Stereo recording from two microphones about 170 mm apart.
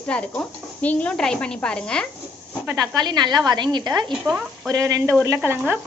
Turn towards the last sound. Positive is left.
turn(degrees=-10)  # may be behind; listen again after turning